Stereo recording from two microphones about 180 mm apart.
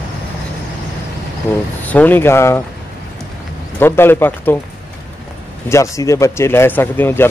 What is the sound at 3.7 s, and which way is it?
Speech, 10° left (ahead or behind).